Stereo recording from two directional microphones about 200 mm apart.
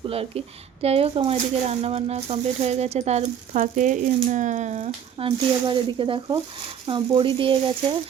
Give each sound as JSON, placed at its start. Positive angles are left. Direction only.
{"t": 0.1, "sound": "speech", "side_deg": -30}
{"t": 5.1, "sound": "speech", "side_deg": -25}